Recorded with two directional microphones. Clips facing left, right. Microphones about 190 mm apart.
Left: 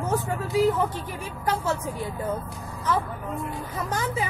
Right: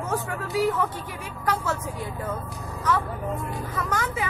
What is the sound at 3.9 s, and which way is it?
Speech, 30° left (ahead or behind).